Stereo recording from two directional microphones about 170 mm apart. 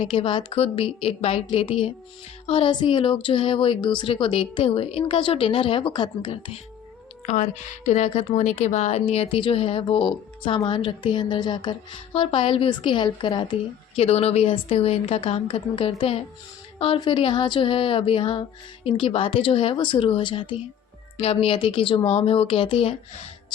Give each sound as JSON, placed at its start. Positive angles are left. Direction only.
{"t": 0.0, "sound": "a woman's voice", "side_deg": 30}
{"t": 7.3, "sound": "a woman's voice", "side_deg": 45}